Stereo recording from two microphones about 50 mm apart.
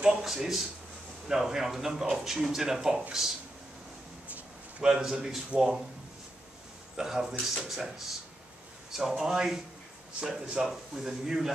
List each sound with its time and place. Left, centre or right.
0.0 s speech: centre
4.3 s a sound: right
4.8 s speech: centre
7.0 s speech: centre